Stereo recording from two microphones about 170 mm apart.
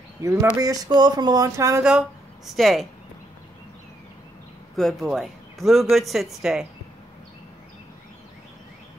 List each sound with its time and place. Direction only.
0.2 s speech: 15° right (ahead or behind)
1.9 s speech: 5° right (ahead or behind)
4.7 s speech: centre (ahead or behind)